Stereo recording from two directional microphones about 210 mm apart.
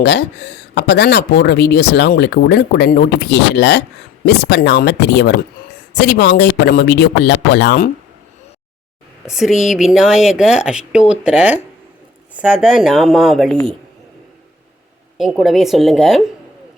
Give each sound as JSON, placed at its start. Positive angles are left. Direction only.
{"t": 0.0, "sound": "speech", "side_deg": 50}
{"t": 9.2, "sound": "speech", "side_deg": 0}
{"t": 15.2, "sound": "speech", "side_deg": 0}